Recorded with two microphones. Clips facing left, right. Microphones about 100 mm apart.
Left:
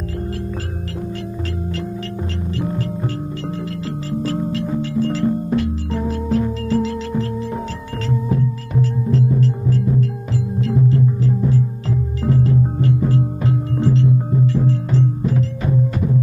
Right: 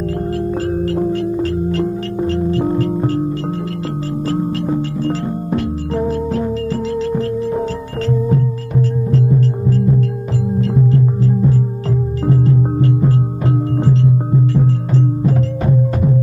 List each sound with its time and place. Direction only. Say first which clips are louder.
0.3 s music: right 9 dB; 35° right (ahead or behind)
4.2 s music: right 3 dB; 45° right (ahead or behind)